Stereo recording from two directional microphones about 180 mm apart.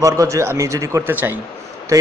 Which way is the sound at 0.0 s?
15° right (ahead or behind).